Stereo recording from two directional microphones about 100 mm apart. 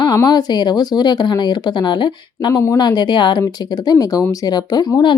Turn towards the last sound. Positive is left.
turn(degrees=45)  # may be behind; listen again after turning